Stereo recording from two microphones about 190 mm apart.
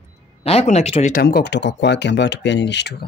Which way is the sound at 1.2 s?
55° left (ahead or behind).